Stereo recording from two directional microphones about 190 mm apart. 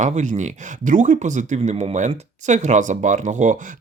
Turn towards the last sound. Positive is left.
turn(degrees=-40)  # may be behind; listen again after turning